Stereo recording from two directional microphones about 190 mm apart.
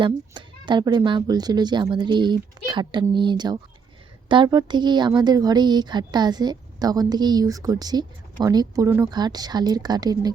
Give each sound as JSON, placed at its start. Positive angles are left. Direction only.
{"t": 0.0, "sound": "a woman's voice", "side_deg": -25}